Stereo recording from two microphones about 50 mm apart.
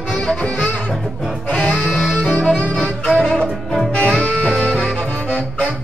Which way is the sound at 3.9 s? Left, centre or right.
Left.